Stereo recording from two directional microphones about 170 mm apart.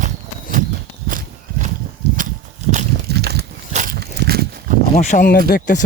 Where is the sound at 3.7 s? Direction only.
45° right (ahead or behind).